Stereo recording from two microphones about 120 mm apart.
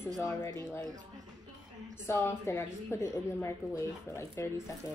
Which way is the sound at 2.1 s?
25° left (ahead or behind).